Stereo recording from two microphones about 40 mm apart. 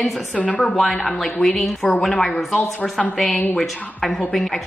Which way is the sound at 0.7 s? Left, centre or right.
Centre.